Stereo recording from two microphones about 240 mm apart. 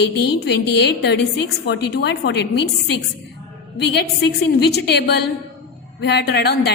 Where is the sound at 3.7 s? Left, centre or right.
Left.